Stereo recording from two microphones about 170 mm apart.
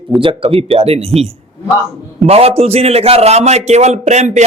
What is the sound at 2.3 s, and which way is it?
A man's voice, 35° right (ahead or behind).